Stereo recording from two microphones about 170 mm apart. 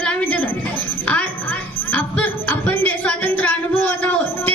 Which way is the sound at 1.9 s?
10° left (ahead or behind).